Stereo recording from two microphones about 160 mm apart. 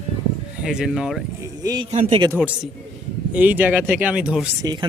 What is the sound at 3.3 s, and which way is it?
Speech, 10° right (ahead or behind).